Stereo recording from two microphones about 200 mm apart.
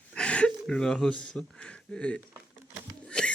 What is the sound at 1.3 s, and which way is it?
Speech, 5° left (ahead or behind).